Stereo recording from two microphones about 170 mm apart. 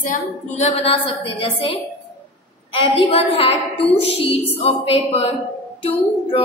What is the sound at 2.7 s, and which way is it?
A woman's voice, 30° left (ahead or behind).